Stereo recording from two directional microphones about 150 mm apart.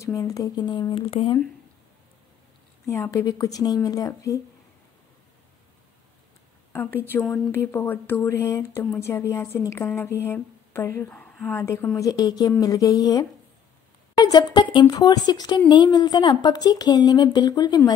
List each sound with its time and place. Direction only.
0.0 s speech: 20° left (ahead or behind)
2.9 s a woman's voice: 20° left (ahead or behind)
6.7 s a woman's voice: 15° left (ahead or behind)